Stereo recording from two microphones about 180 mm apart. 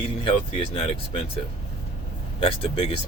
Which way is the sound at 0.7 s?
30° left (ahead or behind).